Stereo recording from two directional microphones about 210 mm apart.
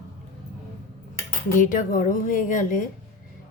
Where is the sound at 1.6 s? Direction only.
40° left (ahead or behind).